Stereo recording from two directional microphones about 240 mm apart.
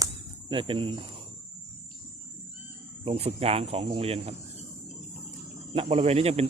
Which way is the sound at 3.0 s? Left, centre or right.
Right.